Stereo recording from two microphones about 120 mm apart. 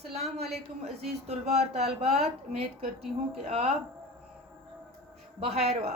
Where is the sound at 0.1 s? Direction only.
60° right (ahead or behind).